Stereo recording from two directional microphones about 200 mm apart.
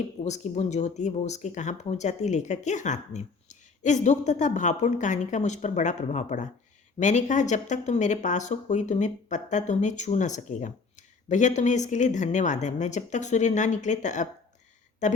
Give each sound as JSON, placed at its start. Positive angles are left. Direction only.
{"t": 0.2, "sound": "speech", "side_deg": 35}